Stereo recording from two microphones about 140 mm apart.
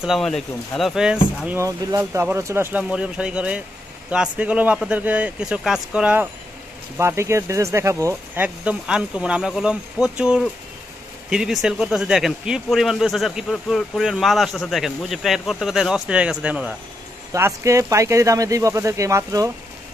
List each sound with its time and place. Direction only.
0.0 s speech: centre (ahead or behind)
1.6 s speech: 20° right (ahead or behind)
7.0 s speech: 20° right (ahead or behind)
17.3 s speech: 20° right (ahead or behind)